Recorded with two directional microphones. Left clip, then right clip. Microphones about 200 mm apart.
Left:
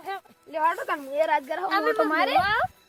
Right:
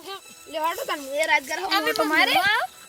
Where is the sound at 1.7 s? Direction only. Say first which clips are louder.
Right 1 dB; 15° left (ahead or behind).